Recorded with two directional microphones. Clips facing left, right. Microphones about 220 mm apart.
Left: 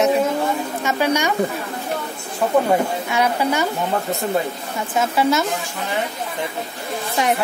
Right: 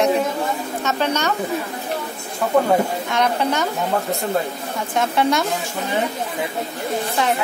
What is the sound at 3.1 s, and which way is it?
Speech, 10° left (ahead or behind).